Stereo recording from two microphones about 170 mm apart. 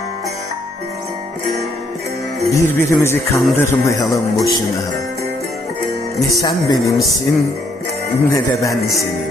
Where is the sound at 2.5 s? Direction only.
15° left (ahead or behind).